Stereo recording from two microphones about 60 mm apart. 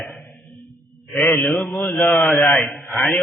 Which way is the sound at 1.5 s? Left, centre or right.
Centre.